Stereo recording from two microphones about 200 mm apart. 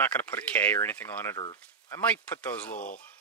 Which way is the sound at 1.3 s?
25° left (ahead or behind).